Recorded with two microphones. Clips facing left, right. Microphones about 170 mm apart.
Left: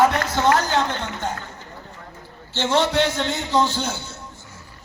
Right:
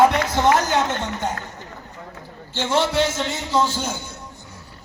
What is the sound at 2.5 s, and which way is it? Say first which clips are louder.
A man's voice: left 1 dB; 5° right (ahead or behind).